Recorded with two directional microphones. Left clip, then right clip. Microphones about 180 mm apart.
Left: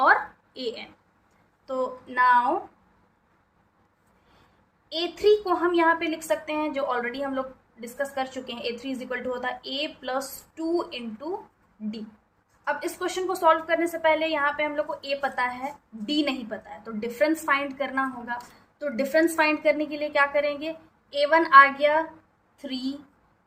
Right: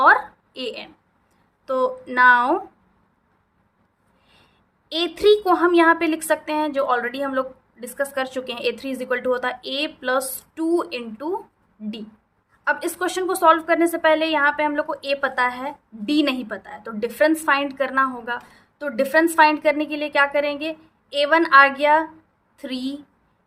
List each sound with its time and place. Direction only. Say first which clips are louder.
0.0 s a sound: right 5 dB; 30° right (ahead or behind)
1.6 s a woman's voice: right 7 dB; 45° right (ahead or behind)
4.9 s a woman's voice: right 5 dB; 45° right (ahead or behind)
12.6 s a woman's voice: right 6 dB; 40° right (ahead or behind)